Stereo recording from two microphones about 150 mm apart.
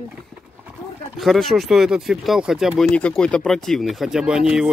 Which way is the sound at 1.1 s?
Centre (ahead or behind).